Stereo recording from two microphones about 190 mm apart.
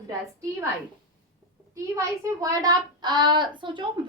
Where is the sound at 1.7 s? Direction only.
15° right (ahead or behind).